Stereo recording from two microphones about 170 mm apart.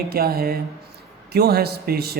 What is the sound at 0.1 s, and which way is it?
A man's voice, 65° right (ahead or behind).